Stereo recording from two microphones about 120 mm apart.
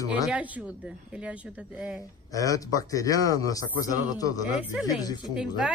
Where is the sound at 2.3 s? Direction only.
30° left (ahead or behind).